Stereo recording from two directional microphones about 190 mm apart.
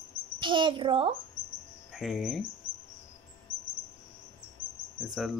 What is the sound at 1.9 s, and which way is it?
Speech, 5° right (ahead or behind).